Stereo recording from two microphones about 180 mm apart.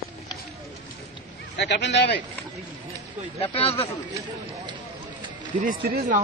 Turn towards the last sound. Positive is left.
turn(degrees=-55)  # may be behind; listen again after turning